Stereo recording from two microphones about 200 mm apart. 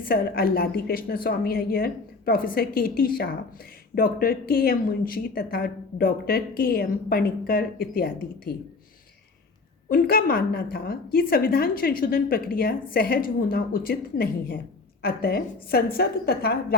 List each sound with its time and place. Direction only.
0.0 s a woman's voice: 45° left (ahead or behind)
9.9 s a woman's voice: 45° left (ahead or behind)